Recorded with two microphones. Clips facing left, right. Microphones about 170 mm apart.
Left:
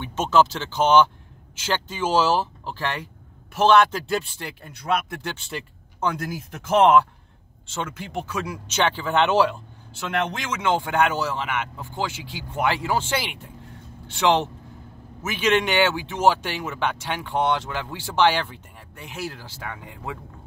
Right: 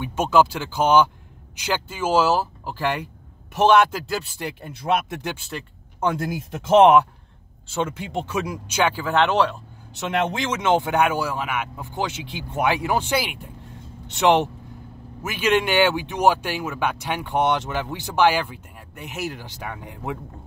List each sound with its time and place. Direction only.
0.0 s speech: 10° right (ahead or behind)
4.0 s speech: centre (ahead or behind)
4.4 s speech: 20° right (ahead or behind)
5.2 s speech: 10° right (ahead or behind)
9.9 s speech: 25° right (ahead or behind)